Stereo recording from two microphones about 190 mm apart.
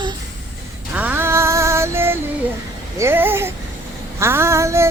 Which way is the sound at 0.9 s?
10° right (ahead or behind).